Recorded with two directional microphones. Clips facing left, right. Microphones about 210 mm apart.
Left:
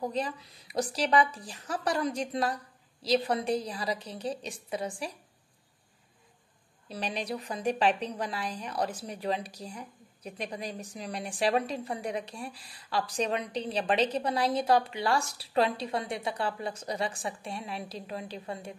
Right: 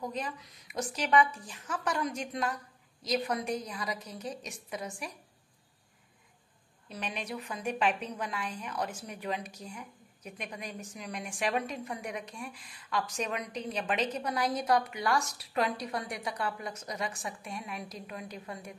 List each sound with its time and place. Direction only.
0.0 s a woman's voice: 35° left (ahead or behind)
6.9 s a woman's voice: 35° left (ahead or behind)